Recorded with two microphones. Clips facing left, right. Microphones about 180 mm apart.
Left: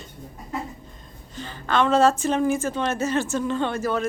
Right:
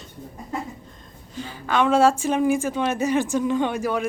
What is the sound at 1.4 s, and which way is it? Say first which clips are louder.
A woman's voice: even; 10° right (ahead or behind).